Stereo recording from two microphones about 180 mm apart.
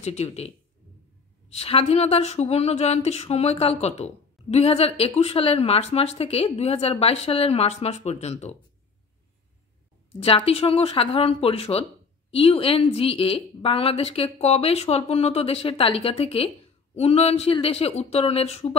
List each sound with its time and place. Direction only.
0.0 s a woman's voice: 35° left (ahead or behind)
1.5 s a woman's voice: 35° left (ahead or behind)
10.2 s a woman's voice: 35° left (ahead or behind)